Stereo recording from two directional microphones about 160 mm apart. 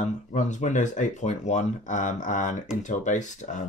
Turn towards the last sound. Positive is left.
turn(degrees=50)  # may be behind; listen again after turning